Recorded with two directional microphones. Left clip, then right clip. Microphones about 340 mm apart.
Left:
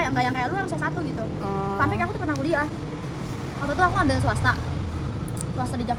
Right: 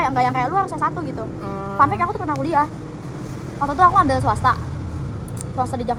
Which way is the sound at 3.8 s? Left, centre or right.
Centre.